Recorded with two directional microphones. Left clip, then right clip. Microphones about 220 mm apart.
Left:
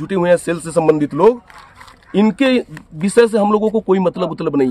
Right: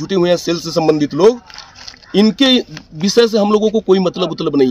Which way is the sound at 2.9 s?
20° left (ahead or behind).